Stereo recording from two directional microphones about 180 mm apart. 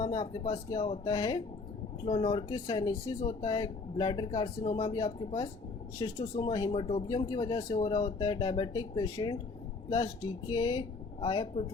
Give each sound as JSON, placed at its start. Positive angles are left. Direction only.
{"t": 0.1, "sound": "speech", "side_deg": 25}